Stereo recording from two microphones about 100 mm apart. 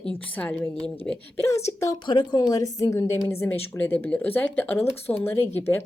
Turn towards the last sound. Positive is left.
turn(degrees=25)  # may be behind; listen again after turning